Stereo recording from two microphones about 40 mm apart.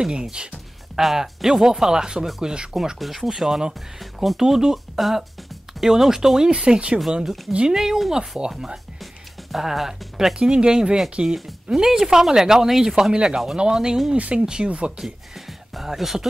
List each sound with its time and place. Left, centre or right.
0.0 s speech: right
0.9 s speech: centre
2.7 s speech: centre
4.0 s speech: centre
4.4 s speech: centre
4.9 s speech: centre
6.5 s speech: right
7.1 s speech: centre
9.0 s music: centre
10.4 s speech: right
11.3 s speech: centre
13.1 s speech: right
14.1 s speech: right
14.4 s speech: centre